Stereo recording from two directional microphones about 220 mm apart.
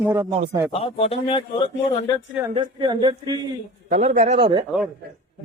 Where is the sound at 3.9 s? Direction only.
35° right (ahead or behind).